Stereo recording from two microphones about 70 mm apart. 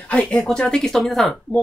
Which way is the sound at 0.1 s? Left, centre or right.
Centre.